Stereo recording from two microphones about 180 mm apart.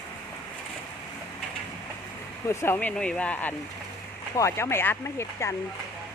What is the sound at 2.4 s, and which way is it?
Speech, 15° left (ahead or behind).